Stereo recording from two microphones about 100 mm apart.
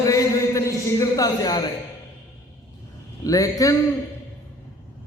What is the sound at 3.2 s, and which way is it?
Speech, 35° left (ahead or behind).